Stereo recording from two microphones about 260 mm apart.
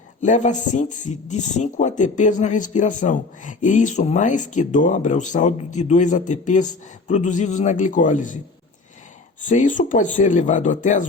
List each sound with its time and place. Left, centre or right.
0.2 s speech: left
9.5 s speech: left